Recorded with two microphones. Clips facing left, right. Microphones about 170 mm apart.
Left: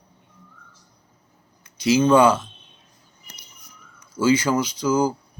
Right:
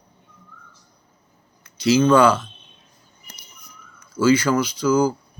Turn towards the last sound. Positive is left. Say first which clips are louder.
# right 2 dB
turn(degrees=20)  # may be behind; listen again after turning